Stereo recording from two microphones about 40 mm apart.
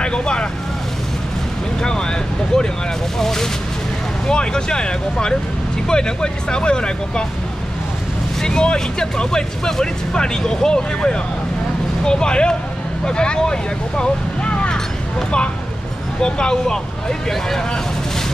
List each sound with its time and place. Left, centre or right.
0.0 s vehicle: left
1.8 s vehicle: centre
3.2 s speech: centre
4.3 s speech: left
8.4 s speech: centre
14.7 s a sound: left
16.2 s speech: centre